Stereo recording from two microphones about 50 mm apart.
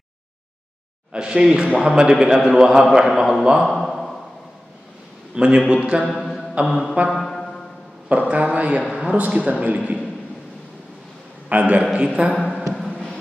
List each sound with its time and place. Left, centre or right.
1.1 s a man's voice: centre
3.6 s a sound: centre
5.3 s a man's voice: centre
6.2 s a sound: centre
6.6 s a man's voice: centre
7.1 s music: centre
8.1 s a man's voice: right
11.4 s a man's voice: right
11.8 s a man's voice: centre
12.4 s a sound: centre